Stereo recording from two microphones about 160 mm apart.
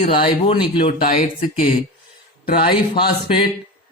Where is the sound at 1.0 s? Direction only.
60° left (ahead or behind).